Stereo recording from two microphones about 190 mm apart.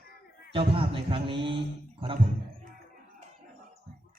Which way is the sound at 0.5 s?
30° right (ahead or behind).